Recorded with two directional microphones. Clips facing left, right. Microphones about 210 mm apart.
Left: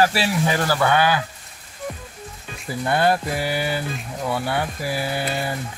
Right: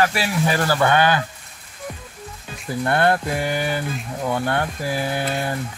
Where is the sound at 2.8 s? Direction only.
5° left (ahead or behind).